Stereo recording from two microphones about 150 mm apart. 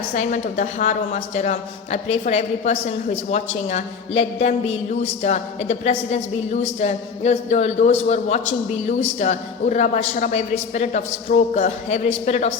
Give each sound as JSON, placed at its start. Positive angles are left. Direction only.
{"t": 0.1, "sound": "a woman's voice", "side_deg": 50}